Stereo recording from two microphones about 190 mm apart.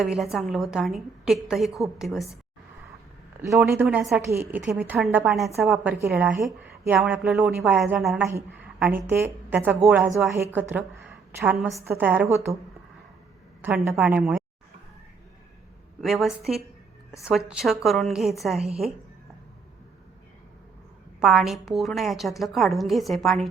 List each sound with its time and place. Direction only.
0.0 s a woman's voice: centre (ahead or behind)
3.8 s a woman's voice: centre (ahead or behind)
10.3 s a woman's voice: 10° right (ahead or behind)
13.6 s a woman's voice: 10° right (ahead or behind)
16.0 s a woman's voice: centre (ahead or behind)
21.2 s a woman's voice: centre (ahead or behind)